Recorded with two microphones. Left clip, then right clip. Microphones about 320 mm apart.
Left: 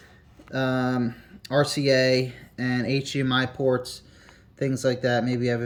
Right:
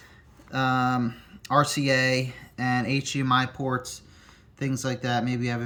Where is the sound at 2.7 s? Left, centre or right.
Right.